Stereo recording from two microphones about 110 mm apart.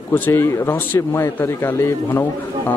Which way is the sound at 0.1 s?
20° left (ahead or behind).